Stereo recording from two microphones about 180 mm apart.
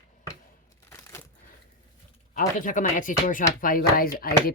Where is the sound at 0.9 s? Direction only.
15° left (ahead or behind).